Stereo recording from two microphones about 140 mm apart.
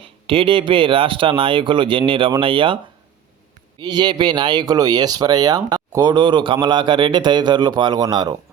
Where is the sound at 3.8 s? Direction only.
30° right (ahead or behind).